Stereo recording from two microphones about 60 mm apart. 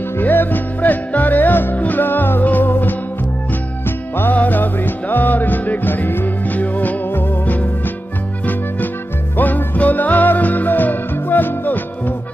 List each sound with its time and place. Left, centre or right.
0.2 s music: left
4.2 s music: left
9.4 s music: left